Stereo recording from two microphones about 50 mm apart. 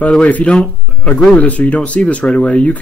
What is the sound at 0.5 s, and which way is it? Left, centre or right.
Speech, centre.